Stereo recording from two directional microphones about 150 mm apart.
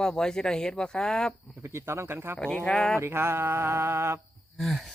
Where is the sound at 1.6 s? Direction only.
15° right (ahead or behind).